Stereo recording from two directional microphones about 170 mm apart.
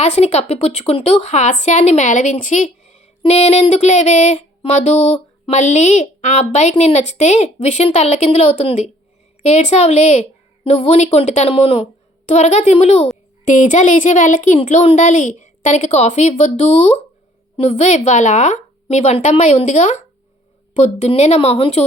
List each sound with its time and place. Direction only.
0.0 s a woman's voice: 40° left (ahead or behind)